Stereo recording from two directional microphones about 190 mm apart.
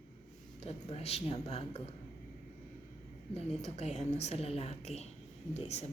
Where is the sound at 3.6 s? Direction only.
35° left (ahead or behind).